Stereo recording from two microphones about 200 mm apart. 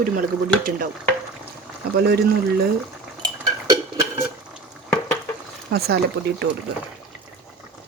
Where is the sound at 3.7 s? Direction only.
15° right (ahead or behind).